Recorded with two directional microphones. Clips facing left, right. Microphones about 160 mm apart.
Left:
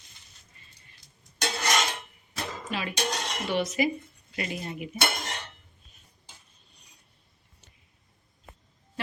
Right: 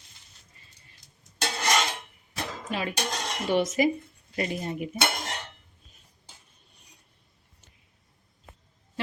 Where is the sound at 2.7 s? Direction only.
45° right (ahead or behind).